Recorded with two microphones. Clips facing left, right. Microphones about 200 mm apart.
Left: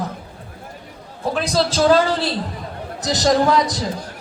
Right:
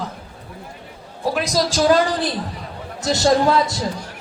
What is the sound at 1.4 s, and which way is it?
Speech, 10° right (ahead or behind).